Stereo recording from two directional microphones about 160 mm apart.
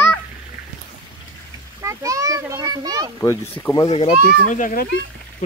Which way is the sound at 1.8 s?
20° right (ahead or behind).